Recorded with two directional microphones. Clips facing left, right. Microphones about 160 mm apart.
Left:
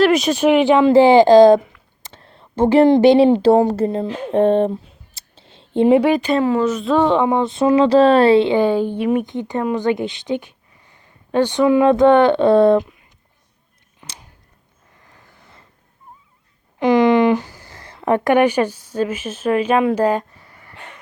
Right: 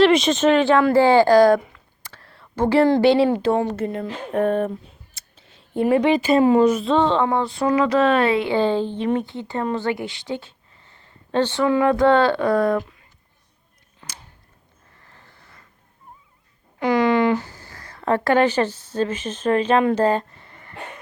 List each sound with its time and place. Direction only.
0.0 s speech: 5° left (ahead or behind); by 3.4 s 20° left (ahead or behind)
3.4 s speech: 35° left (ahead or behind)
6.0 s speech: centre (ahead or behind)
6.3 s speech: 15° right (ahead or behind)
6.8 s speech: 10° left (ahead or behind); by 8.5 s 30° left (ahead or behind)
8.5 s a woman's voice: 10° left (ahead or behind)
14.0 s a sound: 15° left (ahead or behind)
16.8 s a sound: 20° left (ahead or behind)